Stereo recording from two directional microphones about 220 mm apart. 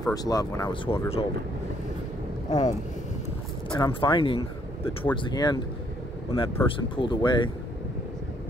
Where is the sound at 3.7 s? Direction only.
20° left (ahead or behind).